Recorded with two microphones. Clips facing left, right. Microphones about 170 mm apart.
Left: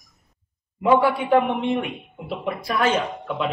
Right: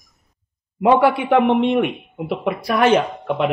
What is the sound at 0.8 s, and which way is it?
A man's voice, 70° right (ahead or behind).